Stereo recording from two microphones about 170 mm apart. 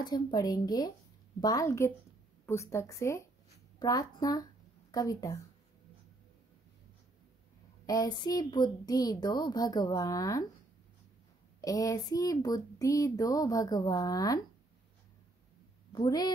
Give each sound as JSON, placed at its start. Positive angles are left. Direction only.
{"t": 0.1, "sound": "speech", "side_deg": 25}
{"t": 7.8, "sound": "speech", "side_deg": 20}
{"t": 11.6, "sound": "speech", "side_deg": 20}
{"t": 15.9, "sound": "a woman's voice", "side_deg": 25}